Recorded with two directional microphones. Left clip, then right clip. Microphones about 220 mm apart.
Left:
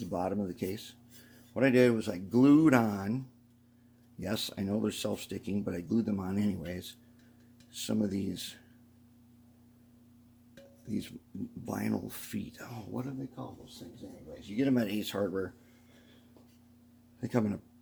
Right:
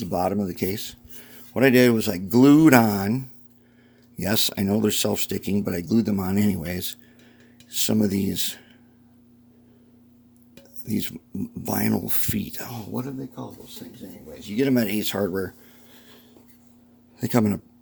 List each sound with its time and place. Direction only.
0.0 s speech: 40° right (ahead or behind)
4.2 s speech: 45° right (ahead or behind)
10.8 s speech: 45° right (ahead or behind)
14.4 s speech: 45° right (ahead or behind)
17.2 s speech: 50° right (ahead or behind)